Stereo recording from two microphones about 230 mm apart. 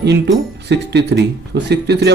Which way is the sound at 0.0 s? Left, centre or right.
Right.